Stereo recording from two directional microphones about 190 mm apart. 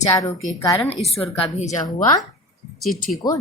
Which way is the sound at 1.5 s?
40° left (ahead or behind).